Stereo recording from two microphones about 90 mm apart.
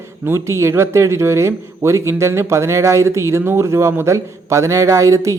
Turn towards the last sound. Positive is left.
turn(degrees=-35)  # may be behind; listen again after turning